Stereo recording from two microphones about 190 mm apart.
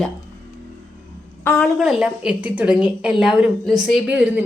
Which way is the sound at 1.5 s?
5° left (ahead or behind).